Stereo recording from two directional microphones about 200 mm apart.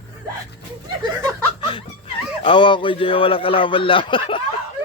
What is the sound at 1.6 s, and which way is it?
Speech, 25° left (ahead or behind).